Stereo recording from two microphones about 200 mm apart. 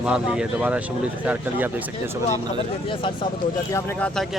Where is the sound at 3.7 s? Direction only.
10° left (ahead or behind).